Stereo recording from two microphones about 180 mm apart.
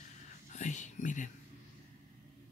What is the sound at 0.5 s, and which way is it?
Whispering, 40° left (ahead or behind).